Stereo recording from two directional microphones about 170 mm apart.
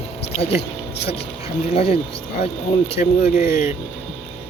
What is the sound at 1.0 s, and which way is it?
Speech, 35° left (ahead or behind).